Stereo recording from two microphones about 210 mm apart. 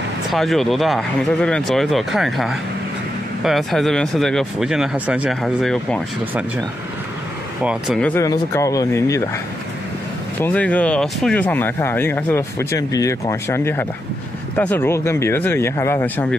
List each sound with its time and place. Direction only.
0.3 s speech: centre (ahead or behind)
7.6 s speech: centre (ahead or behind)
8.1 s speech: 15° left (ahead or behind)
10.4 s speech: 5° left (ahead or behind)